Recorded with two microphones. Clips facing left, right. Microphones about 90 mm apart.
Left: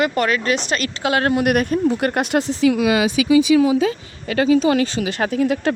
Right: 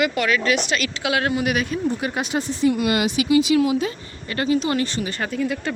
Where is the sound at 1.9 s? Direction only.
60° left (ahead or behind); by 2.7 s 85° left.